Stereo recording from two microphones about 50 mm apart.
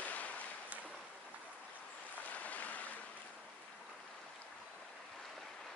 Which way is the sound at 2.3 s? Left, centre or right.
Left.